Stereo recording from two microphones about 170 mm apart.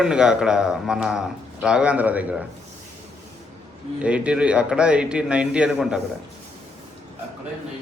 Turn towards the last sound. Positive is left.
turn(degrees=-5)  # may be behind; listen again after turning